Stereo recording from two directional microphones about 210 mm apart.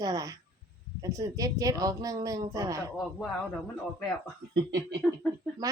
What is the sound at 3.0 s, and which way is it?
Speech, centre (ahead or behind).